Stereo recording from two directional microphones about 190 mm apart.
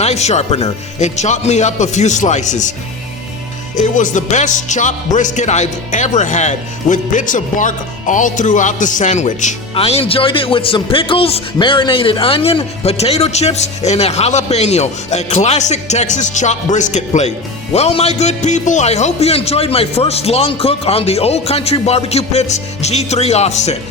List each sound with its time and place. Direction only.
0.0 s speech: 35° left (ahead or behind)
3.8 s speech: 40° left (ahead or behind)